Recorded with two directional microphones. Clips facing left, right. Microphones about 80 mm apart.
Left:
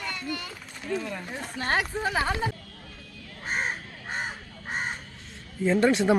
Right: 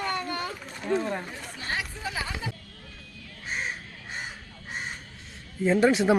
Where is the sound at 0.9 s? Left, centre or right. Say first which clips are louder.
Right 4 dB; right.